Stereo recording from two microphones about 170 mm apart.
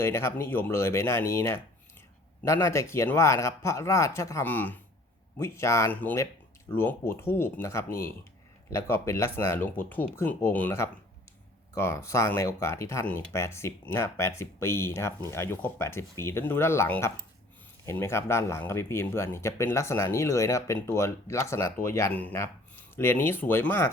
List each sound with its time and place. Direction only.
0.0 s speech: 15° left (ahead or behind)